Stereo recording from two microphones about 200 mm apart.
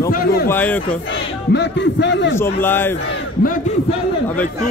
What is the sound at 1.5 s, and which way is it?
Speech, 60° left (ahead or behind).